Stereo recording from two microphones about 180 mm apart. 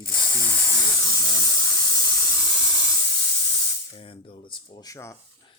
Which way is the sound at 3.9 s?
30° left (ahead or behind).